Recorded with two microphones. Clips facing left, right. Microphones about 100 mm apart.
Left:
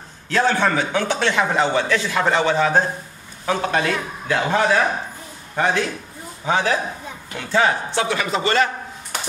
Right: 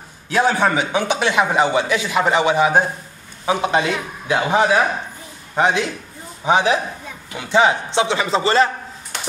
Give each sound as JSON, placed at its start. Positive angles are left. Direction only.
{"t": 0.3, "sound": "a man's voice", "side_deg": -15}